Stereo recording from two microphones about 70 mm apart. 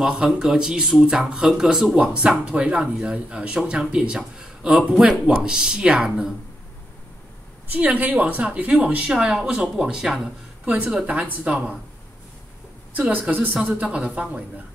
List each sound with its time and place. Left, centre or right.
0.0 s a man's voice: centre
7.7 s speech: centre
13.1 s speech: right
13.7 s speech: centre